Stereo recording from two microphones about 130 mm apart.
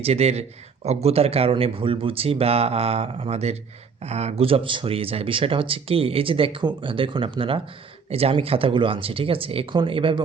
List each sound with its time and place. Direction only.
0.0 s speech: 55° right (ahead or behind)